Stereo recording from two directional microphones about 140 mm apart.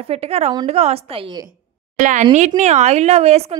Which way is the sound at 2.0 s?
65° right (ahead or behind).